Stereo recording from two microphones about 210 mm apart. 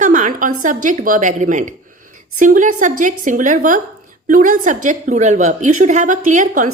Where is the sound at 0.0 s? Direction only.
35° right (ahead or behind).